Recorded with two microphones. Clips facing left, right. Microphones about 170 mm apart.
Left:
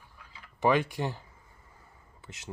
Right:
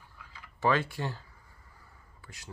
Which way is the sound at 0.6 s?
15° left (ahead or behind).